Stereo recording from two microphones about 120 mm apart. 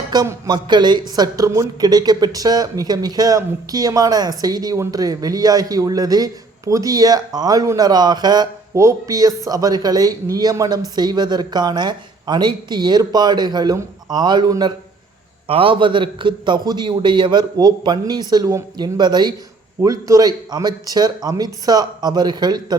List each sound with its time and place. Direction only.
0.4 s speech: 35° right (ahead or behind)
8.7 s speech: 25° right (ahead or behind)
15.4 s speech: 50° right (ahead or behind)